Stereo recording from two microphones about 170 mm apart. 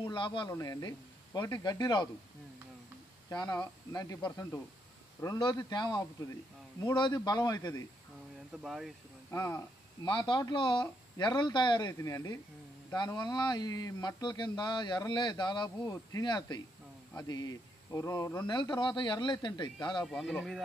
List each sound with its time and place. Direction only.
0.0 s speech: 30° left (ahead or behind)
3.3 s speech: 20° left (ahead or behind)
8.6 s speech: centre (ahead or behind)
9.3 s speech: 15° left (ahead or behind)
10.0 s speech: 25° left (ahead or behind)
20.1 s speech: 5° left (ahead or behind)